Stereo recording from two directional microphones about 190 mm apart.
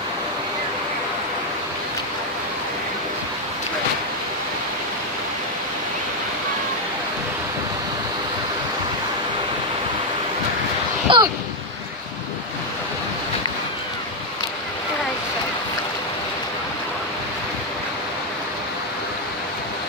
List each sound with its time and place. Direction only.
11.1 s waves: 25° right (ahead or behind)